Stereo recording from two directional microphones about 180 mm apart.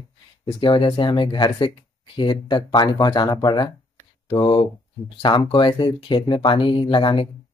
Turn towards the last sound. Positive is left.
turn(degrees=30)  # may be behind; listen again after turning